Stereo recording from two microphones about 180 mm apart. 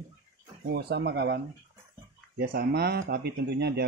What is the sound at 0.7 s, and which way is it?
Speech, 70° right (ahead or behind).